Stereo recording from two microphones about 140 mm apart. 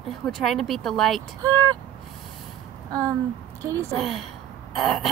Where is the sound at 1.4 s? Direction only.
25° right (ahead or behind).